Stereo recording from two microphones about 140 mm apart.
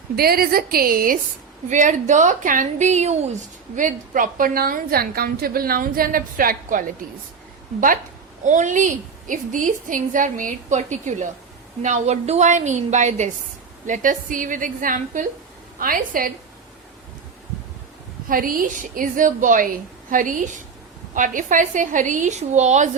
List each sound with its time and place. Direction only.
0.2 s a woman's voice: 90° right
1.7 s a woman's voice: 65° right (ahead or behind)
3.8 s a woman's voice: 70° right (ahead or behind)
8.4 s a woman's voice: 60° right (ahead or behind)
15.8 s a woman's voice: 90° right
18.3 s a woman's voice: 85° right; by 22.9 s 55° right (ahead or behind)